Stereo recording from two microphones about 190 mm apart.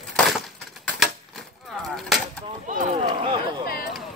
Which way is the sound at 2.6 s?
40° right (ahead or behind).